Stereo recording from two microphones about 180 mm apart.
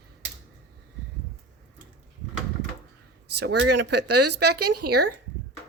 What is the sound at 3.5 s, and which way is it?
Speech, 70° right (ahead or behind).